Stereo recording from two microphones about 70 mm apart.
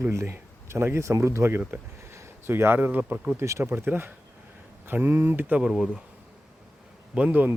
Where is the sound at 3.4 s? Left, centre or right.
Right.